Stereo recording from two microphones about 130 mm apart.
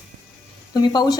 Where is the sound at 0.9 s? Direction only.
30° left (ahead or behind).